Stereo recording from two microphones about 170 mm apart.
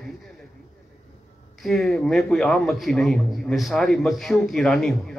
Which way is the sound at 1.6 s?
Centre (ahead or behind).